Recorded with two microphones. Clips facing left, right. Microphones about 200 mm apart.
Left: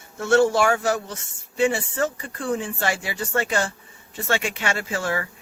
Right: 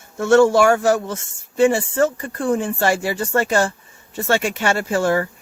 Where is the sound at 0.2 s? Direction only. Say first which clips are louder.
Right 5 dB; 50° right (ahead or behind).